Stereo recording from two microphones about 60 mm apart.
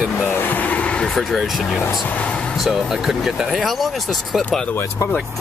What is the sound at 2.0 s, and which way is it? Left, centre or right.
Speech, left.